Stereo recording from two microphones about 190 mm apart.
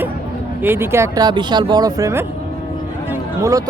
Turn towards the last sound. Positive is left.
turn(degrees=-15)  # may be behind; listen again after turning